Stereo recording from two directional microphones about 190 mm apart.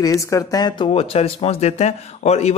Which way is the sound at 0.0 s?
15° left (ahead or behind).